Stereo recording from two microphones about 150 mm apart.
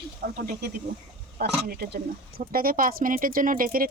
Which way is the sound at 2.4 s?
75° right (ahead or behind).